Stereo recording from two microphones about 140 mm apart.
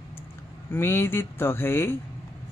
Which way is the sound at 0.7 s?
15° left (ahead or behind).